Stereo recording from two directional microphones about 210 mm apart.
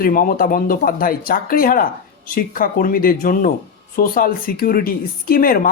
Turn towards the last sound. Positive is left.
turn(degrees=40)  # may be behind; listen again after turning